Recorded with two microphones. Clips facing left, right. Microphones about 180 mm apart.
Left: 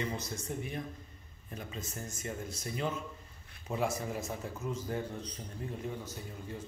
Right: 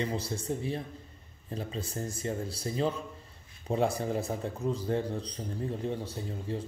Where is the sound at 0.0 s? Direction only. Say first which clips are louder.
Right 5 dB; 30° right (ahead or behind).